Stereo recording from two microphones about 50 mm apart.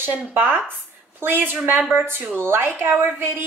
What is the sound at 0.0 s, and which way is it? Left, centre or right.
A woman's voice, right.